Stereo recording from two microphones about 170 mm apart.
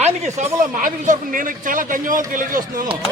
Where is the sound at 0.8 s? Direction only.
55° right (ahead or behind).